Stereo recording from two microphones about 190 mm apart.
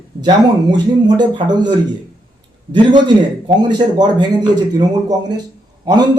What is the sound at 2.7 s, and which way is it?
Speech, 25° right (ahead or behind).